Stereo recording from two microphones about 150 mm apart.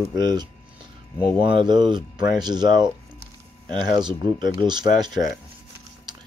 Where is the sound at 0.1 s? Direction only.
25° right (ahead or behind).